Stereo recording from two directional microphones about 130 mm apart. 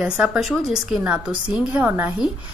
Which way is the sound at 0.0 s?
5° right (ahead or behind).